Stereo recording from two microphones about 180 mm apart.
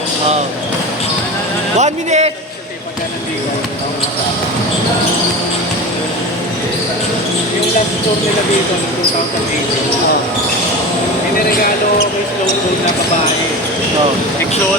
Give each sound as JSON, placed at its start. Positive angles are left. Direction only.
{"t": 1.8, "sound": "speech", "side_deg": -40}